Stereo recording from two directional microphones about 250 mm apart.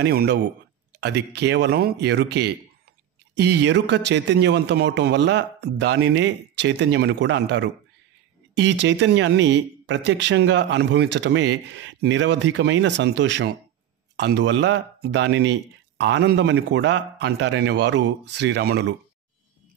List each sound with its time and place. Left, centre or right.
0.0 s speech: right